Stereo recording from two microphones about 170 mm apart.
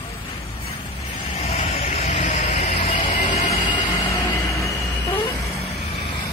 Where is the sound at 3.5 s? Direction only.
20° left (ahead or behind).